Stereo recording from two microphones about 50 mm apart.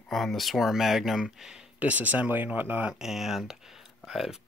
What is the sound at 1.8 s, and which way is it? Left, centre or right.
Speech, right.